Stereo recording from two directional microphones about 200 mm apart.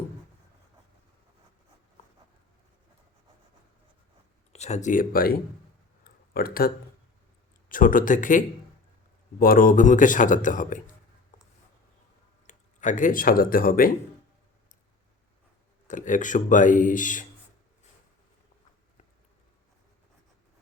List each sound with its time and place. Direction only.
4.5 s speech: 35° left (ahead or behind)
6.3 s speech: 50° left (ahead or behind)
7.7 s speech: 40° left (ahead or behind)
11.3 s a sound: 35° left (ahead or behind)
12.5 s speech: 40° left (ahead or behind)
15.9 s speech: 40° left (ahead or behind)